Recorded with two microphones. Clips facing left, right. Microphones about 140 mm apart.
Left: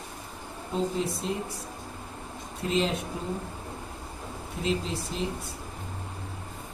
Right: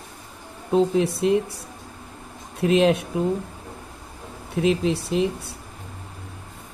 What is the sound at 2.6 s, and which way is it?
Speech, 70° right (ahead or behind).